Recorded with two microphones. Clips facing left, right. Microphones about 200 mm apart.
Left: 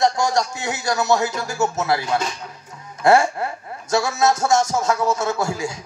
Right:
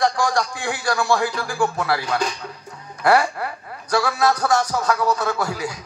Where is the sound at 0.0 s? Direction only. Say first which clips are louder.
Left 1 dB; 25° left (ahead or behind).